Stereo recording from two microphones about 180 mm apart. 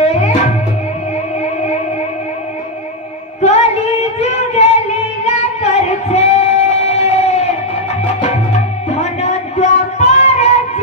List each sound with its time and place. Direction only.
0.0 s music: 40° left (ahead or behind)
3.3 s singing: 35° left (ahead or behind)
8.2 s music: 40° left (ahead or behind)